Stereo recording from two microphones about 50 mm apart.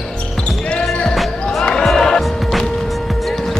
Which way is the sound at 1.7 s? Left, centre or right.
Centre.